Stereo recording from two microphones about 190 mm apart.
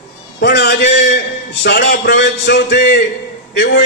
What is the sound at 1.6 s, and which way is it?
A man's voice, 60° left (ahead or behind).